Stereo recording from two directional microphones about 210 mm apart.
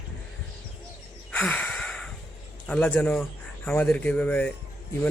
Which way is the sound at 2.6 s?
5° left (ahead or behind).